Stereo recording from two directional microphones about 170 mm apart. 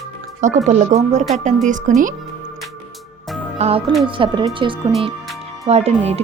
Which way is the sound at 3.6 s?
35° right (ahead or behind).